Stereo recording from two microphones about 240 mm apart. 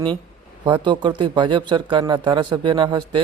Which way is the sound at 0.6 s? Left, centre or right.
Centre.